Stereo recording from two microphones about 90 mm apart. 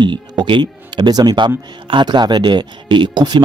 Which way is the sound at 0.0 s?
60° right (ahead or behind).